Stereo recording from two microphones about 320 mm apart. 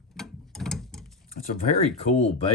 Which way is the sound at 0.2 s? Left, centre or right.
Centre.